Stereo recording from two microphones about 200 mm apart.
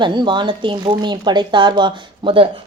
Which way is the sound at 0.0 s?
20° right (ahead or behind).